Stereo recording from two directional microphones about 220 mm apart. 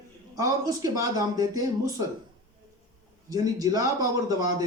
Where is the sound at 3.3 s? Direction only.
15° right (ahead or behind).